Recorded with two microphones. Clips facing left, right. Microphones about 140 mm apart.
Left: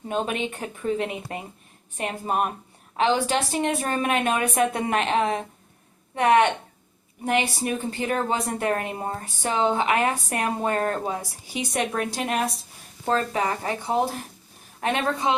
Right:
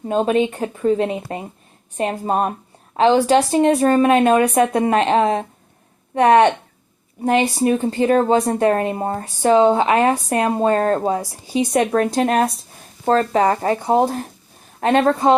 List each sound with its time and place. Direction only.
0.1 s speech: 30° right (ahead or behind)
12.0 s speech: 50° right (ahead or behind)